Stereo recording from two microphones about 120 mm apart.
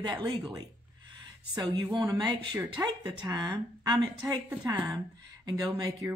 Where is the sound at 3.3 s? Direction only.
35° right (ahead or behind).